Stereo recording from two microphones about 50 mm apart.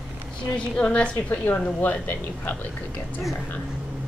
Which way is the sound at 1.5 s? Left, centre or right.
Left.